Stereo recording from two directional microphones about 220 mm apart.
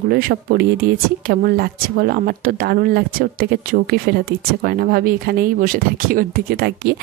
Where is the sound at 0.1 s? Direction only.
40° right (ahead or behind).